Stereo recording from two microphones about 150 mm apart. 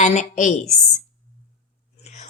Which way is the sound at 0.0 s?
55° left (ahead or behind).